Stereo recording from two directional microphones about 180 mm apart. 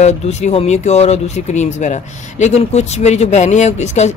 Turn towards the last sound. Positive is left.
turn(degrees=40)  # may be behind; listen again after turning